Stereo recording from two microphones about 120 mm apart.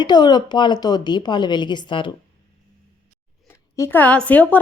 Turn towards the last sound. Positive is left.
turn(degrees=10)  # may be behind; listen again after turning